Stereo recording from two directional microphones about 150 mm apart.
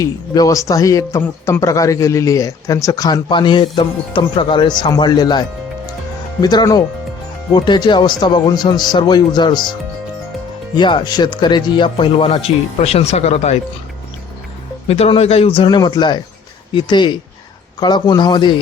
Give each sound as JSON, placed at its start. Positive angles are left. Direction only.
{"t": 0.0, "sound": "a man's voice", "side_deg": 20}
{"t": 10.8, "sound": "speech", "side_deg": 30}
{"t": 14.8, "sound": "a man's voice", "side_deg": 40}